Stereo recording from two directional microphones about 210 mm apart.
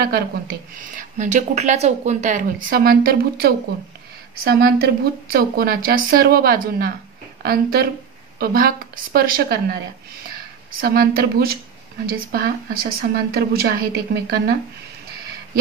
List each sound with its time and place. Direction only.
0.0 s a woman's voice: 45° right (ahead or behind)
10.8 s a woman's voice: 45° right (ahead or behind)